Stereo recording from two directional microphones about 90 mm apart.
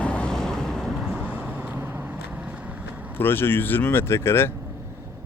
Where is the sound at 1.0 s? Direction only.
15° right (ahead or behind).